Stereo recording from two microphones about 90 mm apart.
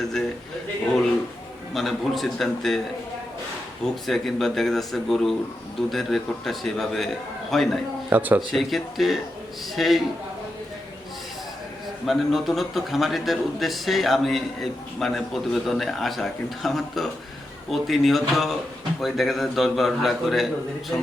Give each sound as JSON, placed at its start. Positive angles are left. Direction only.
{"t": 1.7, "sound": "speech", "side_deg": 0}
{"t": 4.0, "sound": "speech", "side_deg": 0}
{"t": 8.1, "sound": "speech", "side_deg": -20}
{"t": 8.5, "sound": "speech", "side_deg": 0}
{"t": 12.0, "sound": "speech", "side_deg": 0}